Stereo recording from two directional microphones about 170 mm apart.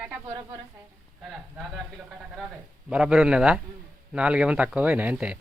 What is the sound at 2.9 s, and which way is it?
Speech, 5° right (ahead or behind).